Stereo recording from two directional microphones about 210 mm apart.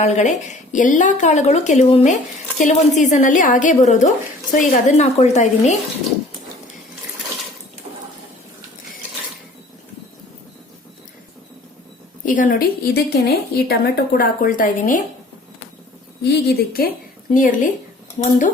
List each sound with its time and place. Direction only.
0.0 s a woman's voice: 35° left (ahead or behind)
12.2 s a woman's voice: 40° left (ahead or behind)
16.2 s a woman's voice: 50° left (ahead or behind)